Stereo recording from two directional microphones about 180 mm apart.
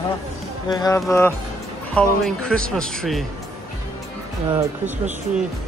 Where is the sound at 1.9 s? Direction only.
5° left (ahead or behind).